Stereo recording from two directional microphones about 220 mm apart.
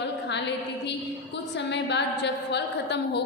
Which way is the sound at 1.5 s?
50° left (ahead or behind).